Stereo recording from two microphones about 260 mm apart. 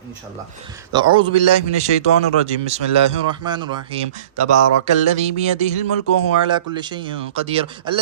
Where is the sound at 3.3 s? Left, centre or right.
Centre.